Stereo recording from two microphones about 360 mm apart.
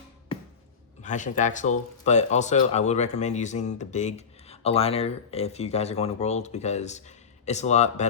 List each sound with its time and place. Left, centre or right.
1.0 s speech: left